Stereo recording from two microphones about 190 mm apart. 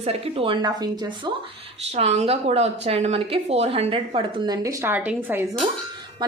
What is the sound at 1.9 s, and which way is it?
Speech, 35° right (ahead or behind).